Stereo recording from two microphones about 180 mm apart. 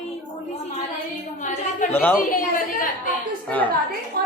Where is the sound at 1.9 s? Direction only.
10° left (ahead or behind).